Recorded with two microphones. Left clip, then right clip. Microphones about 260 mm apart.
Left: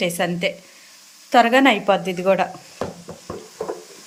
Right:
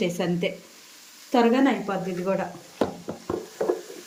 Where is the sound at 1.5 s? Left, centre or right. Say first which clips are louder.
Left 8 dB; left.